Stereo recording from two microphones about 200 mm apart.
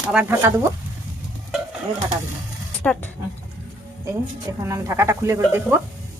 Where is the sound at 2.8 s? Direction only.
5° left (ahead or behind).